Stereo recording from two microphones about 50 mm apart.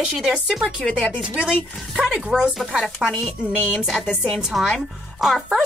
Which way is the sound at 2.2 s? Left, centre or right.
Centre.